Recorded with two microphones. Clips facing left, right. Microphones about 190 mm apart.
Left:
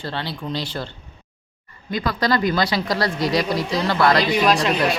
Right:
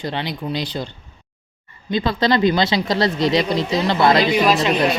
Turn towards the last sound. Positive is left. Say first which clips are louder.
# right 2 dB
turn(degrees=0)  # may be behind; listen again after turning